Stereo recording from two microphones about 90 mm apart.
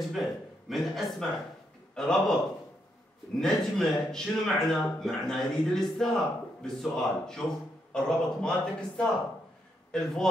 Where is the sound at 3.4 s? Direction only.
5° left (ahead or behind).